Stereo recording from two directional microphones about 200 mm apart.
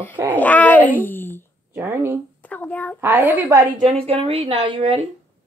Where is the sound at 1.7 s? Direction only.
10° right (ahead or behind).